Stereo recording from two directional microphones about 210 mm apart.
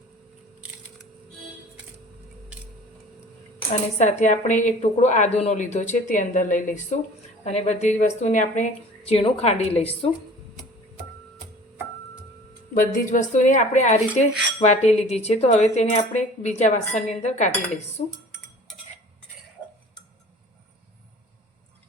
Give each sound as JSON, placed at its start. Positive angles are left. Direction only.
{"t": 4.2, "sound": "speech", "side_deg": 35}
{"t": 12.7, "sound": "speech", "side_deg": 40}